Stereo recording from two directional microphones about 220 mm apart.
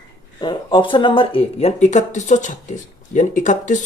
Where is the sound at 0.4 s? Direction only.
20° left (ahead or behind).